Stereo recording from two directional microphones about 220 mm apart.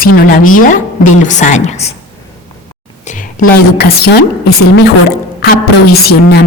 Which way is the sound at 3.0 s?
35° left (ahead or behind).